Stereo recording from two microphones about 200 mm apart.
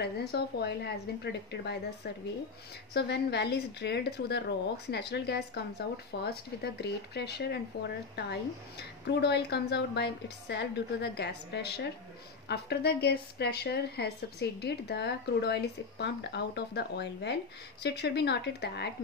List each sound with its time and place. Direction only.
0.0 s speech: 55° left (ahead or behind)
2.9 s speech: 55° left (ahead or behind)